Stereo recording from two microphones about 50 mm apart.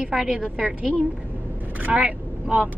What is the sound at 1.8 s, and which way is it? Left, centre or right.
Speech, right.